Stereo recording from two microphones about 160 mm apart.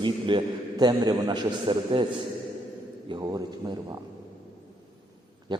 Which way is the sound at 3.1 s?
25° right (ahead or behind).